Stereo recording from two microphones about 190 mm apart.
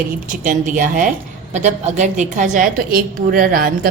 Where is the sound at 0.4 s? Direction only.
45° right (ahead or behind).